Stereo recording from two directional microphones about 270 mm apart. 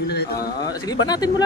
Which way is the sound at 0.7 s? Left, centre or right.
Centre.